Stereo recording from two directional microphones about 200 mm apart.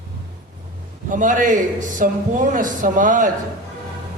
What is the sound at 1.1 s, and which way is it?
A man's voice, 40° right (ahead or behind).